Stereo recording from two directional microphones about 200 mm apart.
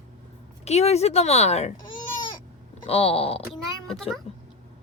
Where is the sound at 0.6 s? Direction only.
30° left (ahead or behind).